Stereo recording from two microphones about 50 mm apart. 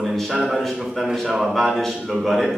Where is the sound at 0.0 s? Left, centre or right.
Centre.